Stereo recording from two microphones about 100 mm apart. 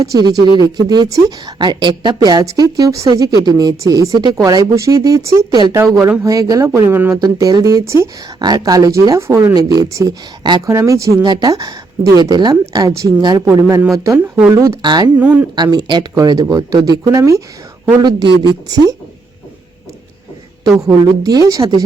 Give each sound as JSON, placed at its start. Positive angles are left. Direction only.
{"t": 0.1, "sound": "a woman's voice", "side_deg": -35}
{"t": 7.2, "sound": "speech", "side_deg": -40}
{"t": 9.6, "sound": "speech", "side_deg": -40}
{"t": 11.2, "sound": "speech", "side_deg": -45}
{"t": 14.8, "sound": "a woman's voice", "side_deg": -45}
{"t": 15.2, "sound": "speech", "side_deg": -15}
{"t": 15.5, "sound": "a woman's voice", "side_deg": -45}
{"t": 18.0, "sound": "a woman's voice", "side_deg": -50}
{"t": 20.7, "sound": "a woman's voice", "side_deg": -40}